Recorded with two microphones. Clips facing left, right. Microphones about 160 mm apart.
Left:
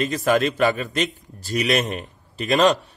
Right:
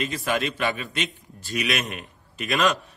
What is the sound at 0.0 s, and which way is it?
A man's voice, 40° left (ahead or behind).